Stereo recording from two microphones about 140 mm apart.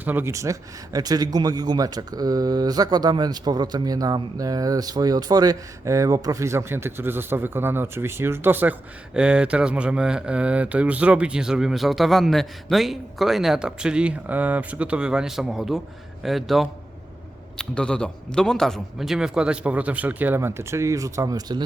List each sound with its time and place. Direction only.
0.0 s a man's voice: 15° right (ahead or behind); by 21.6 s 30° right (ahead or behind)